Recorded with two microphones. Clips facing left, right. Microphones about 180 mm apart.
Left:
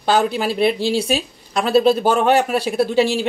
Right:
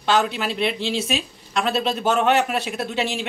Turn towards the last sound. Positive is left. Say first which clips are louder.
# left 9 dB
turn(degrees=35)  # may be behind; listen again after turning